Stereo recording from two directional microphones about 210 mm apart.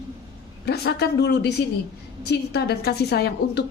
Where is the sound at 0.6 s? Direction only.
50° left (ahead or behind).